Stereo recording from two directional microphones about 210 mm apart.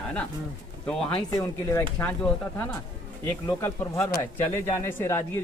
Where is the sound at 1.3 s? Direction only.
15° left (ahead or behind).